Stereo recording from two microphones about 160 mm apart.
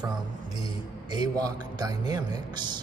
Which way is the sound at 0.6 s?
25° right (ahead or behind).